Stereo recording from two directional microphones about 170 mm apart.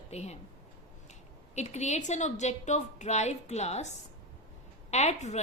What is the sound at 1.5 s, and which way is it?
A woman's voice, 40° left (ahead or behind).